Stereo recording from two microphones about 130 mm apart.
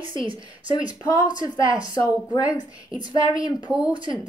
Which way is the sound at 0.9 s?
30° left (ahead or behind).